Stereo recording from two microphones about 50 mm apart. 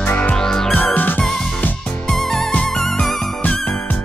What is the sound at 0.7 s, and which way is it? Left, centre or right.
Music, left.